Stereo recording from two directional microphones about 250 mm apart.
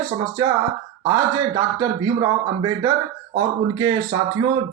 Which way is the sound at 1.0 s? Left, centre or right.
Centre.